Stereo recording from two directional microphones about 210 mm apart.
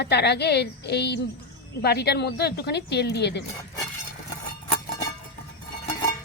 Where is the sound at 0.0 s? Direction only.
50° left (ahead or behind).